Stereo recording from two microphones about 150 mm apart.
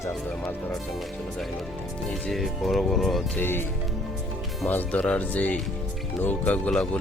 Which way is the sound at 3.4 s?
15° left (ahead or behind).